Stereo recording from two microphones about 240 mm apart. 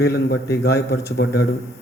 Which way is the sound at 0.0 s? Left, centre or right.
Left.